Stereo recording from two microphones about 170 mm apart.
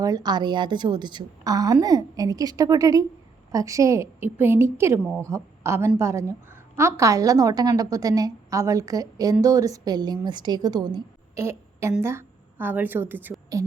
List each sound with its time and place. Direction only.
0.0 s a woman's voice: 25° right (ahead or behind)